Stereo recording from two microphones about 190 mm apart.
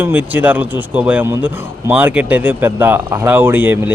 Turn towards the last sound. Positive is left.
turn(degrees=-10)  # may be behind; listen again after turning